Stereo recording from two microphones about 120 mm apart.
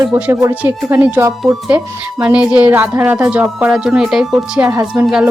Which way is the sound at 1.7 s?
15° right (ahead or behind).